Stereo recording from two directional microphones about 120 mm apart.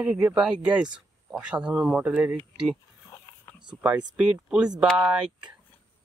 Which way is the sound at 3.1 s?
20° left (ahead or behind).